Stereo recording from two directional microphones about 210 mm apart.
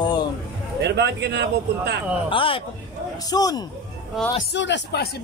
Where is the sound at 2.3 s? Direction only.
25° left (ahead or behind).